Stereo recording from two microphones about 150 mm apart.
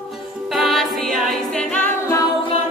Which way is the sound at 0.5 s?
Centre (ahead or behind).